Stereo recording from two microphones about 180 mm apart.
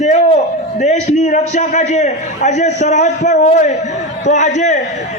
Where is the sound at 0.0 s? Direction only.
40° left (ahead or behind).